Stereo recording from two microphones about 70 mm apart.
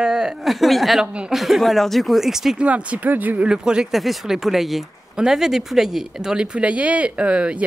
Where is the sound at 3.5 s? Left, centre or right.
Centre.